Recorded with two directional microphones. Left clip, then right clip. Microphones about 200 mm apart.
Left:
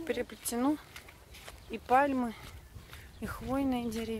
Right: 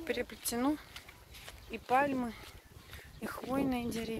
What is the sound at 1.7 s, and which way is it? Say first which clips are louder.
Speech: left 3 dB; 20° left (ahead or behind).